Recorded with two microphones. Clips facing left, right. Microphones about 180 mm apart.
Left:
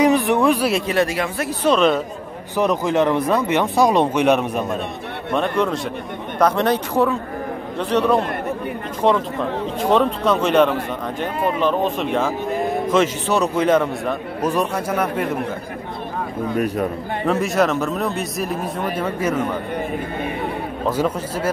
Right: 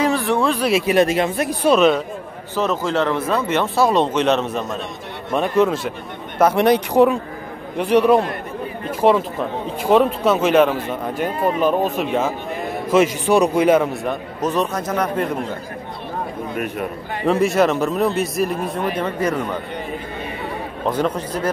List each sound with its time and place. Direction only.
0.0 s speech: 20° left (ahead or behind)
0.8 s a man's voice: 20° right (ahead or behind); by 2.0 s centre (ahead or behind)
2.5 s speech: 15° left (ahead or behind)
5.3 s a man's voice: 5° right (ahead or behind)
14.4 s speech: 10° left (ahead or behind)
16.5 s a man's voice: 35° left (ahead or behind)
17.3 s speech: centre (ahead or behind)
20.9 s speech: 5° left (ahead or behind)